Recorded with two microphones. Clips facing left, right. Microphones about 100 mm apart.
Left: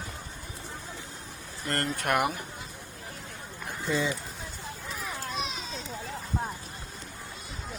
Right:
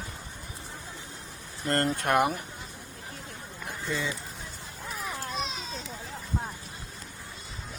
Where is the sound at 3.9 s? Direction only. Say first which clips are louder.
Left 4 dB; 25° left (ahead or behind).